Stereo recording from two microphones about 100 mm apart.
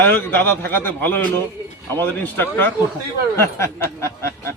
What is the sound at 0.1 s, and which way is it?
A man's voice, 20° left (ahead or behind).